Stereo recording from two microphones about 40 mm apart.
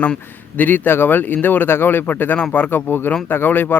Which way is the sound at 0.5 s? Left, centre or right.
Left.